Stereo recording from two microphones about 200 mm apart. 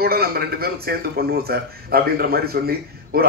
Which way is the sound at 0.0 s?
50° right (ahead or behind).